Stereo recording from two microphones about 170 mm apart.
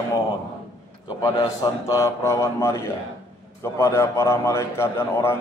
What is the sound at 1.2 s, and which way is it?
A man's voice, 20° left (ahead or behind).